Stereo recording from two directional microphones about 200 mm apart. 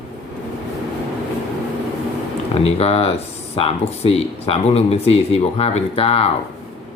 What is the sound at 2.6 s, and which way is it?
Speech, 30° left (ahead or behind).